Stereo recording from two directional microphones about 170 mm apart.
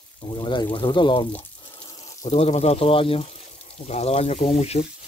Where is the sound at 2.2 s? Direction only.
40° left (ahead or behind).